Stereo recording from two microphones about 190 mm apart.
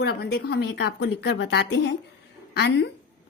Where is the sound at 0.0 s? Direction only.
60° left (ahead or behind).